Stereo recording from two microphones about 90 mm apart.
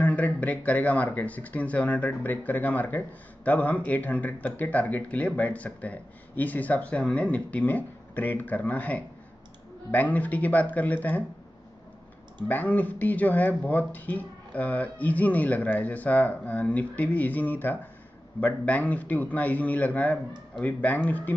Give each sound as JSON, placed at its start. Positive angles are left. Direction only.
{"t": 0.0, "sound": "speech", "side_deg": 15}
{"t": 12.4, "sound": "speech", "side_deg": 20}